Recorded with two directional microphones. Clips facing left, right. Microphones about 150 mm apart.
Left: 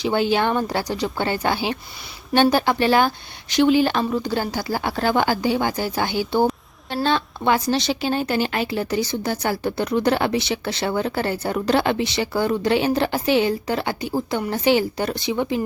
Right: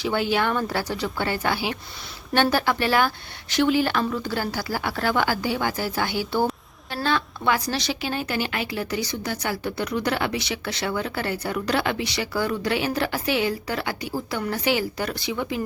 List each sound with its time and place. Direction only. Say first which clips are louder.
0.0 s a woman's voice: left 3 dB; 25° left (ahead or behind)